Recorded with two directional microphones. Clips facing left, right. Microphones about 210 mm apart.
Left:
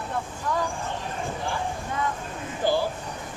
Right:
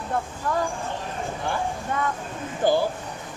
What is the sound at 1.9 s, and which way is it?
Speech, 55° right (ahead or behind).